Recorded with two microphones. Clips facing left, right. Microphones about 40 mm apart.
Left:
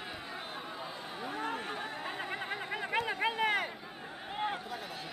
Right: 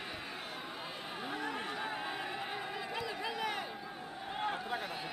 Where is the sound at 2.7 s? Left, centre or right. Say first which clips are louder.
Left 5 dB; left.